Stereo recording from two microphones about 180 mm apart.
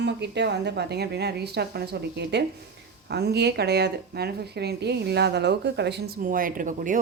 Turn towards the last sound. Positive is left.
turn(degrees=-50)  # may be behind; listen again after turning